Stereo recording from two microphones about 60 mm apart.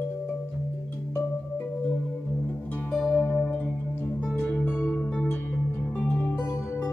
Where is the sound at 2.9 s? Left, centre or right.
Centre.